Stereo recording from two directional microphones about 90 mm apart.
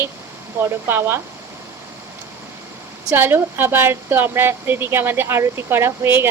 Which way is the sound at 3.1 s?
25° right (ahead or behind).